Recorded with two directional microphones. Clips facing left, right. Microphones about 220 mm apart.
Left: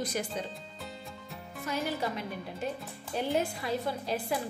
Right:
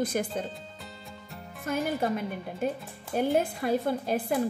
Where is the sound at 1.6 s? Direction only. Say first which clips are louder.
Right 5 dB; 50° right (ahead or behind).